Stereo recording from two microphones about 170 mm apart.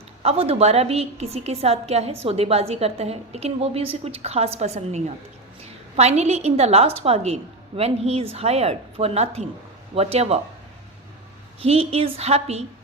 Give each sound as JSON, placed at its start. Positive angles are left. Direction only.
{"t": 0.2, "sound": "a woman's voice", "side_deg": -35}
{"t": 11.6, "sound": "a woman's voice", "side_deg": -35}